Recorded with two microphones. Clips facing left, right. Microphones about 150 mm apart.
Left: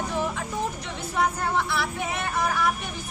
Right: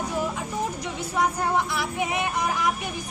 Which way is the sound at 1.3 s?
15° right (ahead or behind).